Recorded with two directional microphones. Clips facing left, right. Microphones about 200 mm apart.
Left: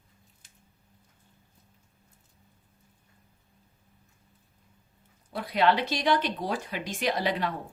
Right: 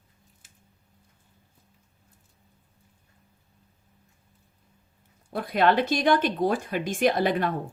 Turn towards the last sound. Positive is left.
turn(degrees=-50)  # may be behind; listen again after turning